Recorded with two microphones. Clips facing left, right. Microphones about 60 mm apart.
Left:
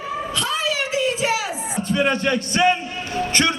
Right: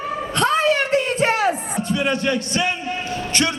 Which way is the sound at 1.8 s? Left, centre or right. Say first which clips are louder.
Left 3 dB; left.